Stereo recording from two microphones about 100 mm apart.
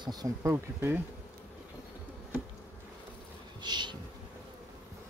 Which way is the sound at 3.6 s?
45° right (ahead or behind).